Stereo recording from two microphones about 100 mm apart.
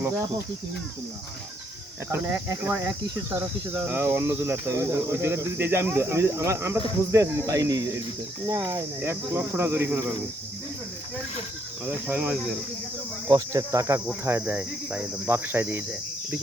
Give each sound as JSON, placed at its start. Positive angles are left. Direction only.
{"t": 2.0, "sound": "speech", "side_deg": -30}
{"t": 11.9, "sound": "speech", "side_deg": -15}
{"t": 13.5, "sound": "speech", "side_deg": -35}